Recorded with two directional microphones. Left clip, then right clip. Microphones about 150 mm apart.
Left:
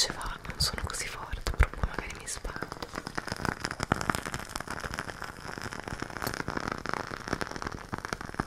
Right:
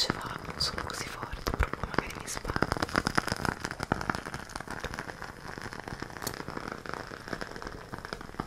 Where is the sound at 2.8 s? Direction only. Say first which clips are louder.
Right 9 dB; 40° right (ahead or behind).